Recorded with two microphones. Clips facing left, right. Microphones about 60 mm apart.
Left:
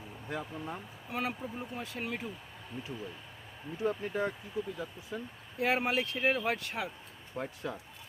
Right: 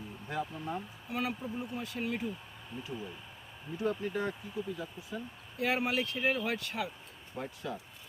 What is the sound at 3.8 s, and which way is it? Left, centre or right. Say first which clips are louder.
Speech: left 1 dB; centre.